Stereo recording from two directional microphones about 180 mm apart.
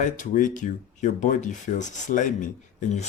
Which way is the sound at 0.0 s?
45° left (ahead or behind).